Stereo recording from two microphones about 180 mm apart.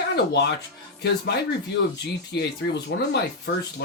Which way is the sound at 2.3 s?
70° left (ahead or behind).